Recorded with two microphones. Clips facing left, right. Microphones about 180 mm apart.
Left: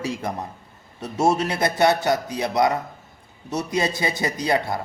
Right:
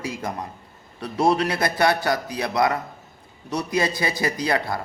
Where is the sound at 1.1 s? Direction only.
25° left (ahead or behind).